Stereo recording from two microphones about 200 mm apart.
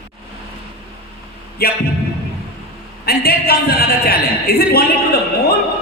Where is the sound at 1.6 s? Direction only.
50° left (ahead or behind).